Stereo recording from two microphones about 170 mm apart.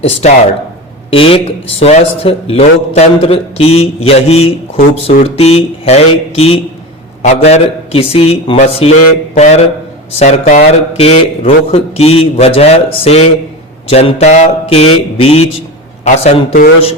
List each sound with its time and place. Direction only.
0.2 s a man's voice: 40° left (ahead or behind)